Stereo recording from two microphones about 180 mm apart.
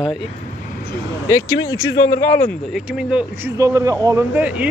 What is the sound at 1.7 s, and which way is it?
Speech, 90° left.